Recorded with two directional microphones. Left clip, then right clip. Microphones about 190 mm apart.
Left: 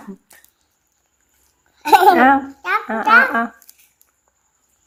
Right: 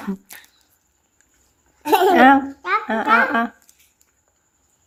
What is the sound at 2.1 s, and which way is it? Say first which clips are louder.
A woman's voice: right 1 dB; 10° right (ahead or behind).